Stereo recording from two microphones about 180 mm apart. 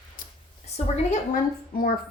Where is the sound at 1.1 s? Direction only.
50° left (ahead or behind).